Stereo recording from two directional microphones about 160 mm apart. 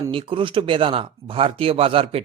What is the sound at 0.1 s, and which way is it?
Speech, 35° right (ahead or behind).